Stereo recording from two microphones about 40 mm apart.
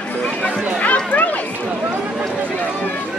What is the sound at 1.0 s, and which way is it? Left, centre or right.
Speech, left.